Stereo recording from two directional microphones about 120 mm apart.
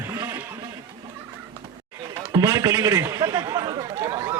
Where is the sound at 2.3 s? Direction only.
30° right (ahead or behind).